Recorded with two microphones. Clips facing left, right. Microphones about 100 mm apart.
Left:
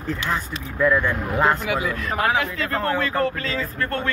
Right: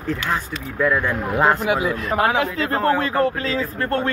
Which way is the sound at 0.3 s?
5° right (ahead or behind).